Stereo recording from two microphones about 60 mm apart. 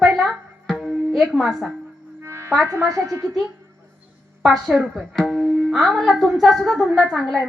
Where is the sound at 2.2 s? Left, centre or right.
Right.